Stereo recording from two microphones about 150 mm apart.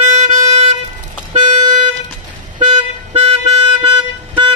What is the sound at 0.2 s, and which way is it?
Music, 45° right (ahead or behind).